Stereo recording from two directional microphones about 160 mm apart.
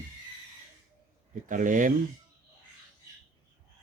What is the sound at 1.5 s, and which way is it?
Speech, 55° right (ahead or behind).